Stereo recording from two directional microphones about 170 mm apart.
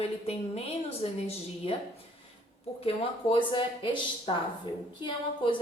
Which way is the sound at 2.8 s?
35° left (ahead or behind).